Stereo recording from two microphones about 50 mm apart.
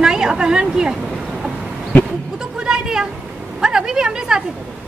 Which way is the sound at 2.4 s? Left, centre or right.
Centre.